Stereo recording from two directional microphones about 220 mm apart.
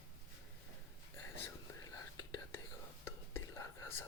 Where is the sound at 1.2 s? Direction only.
10° left (ahead or behind).